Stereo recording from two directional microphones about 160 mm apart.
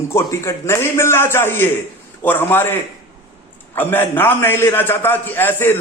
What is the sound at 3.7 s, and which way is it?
A man's voice, 10° left (ahead or behind).